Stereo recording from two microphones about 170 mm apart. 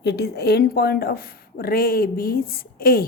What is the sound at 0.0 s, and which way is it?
A woman's voice, 75° left (ahead or behind).